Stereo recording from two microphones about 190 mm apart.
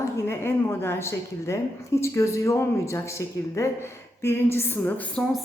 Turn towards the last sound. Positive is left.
turn(degrees=10)  # may be behind; listen again after turning